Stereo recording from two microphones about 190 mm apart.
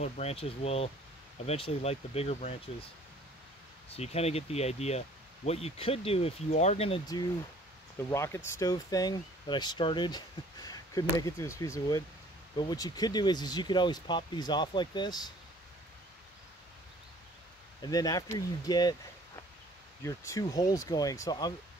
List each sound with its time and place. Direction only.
0.0 s speech: 35° left (ahead or behind)
3.9 s speech: 35° left (ahead or behind)
8.1 s speech: 15° left (ahead or behind)
17.8 s speech: 20° left (ahead or behind)
20.0 s speech: 15° left (ahead or behind)